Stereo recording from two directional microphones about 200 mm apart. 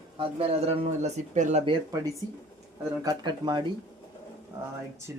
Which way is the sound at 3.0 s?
20° right (ahead or behind).